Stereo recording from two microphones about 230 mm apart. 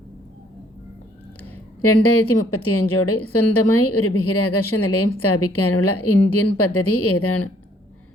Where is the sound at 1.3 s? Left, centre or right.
Left.